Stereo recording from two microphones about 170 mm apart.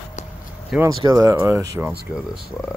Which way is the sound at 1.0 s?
20° right (ahead or behind).